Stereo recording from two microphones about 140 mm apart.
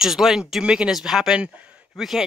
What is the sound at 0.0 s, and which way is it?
Speech, centre (ahead or behind).